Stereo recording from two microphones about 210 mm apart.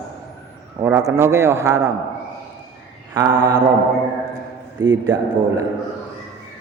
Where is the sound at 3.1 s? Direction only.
15° right (ahead or behind).